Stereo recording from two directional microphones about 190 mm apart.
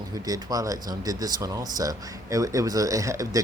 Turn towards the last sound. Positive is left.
turn(degrees=-15)  # may be behind; listen again after turning